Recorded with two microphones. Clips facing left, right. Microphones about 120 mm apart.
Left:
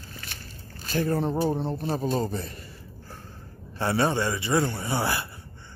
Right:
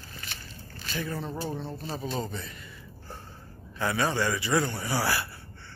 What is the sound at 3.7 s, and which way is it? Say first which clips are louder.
A man's voice: left 3 dB; 30° left (ahead or behind).